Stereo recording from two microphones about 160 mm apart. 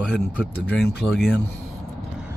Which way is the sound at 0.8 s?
90° left.